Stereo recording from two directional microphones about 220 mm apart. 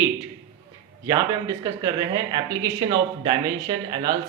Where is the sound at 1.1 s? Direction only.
15° right (ahead or behind).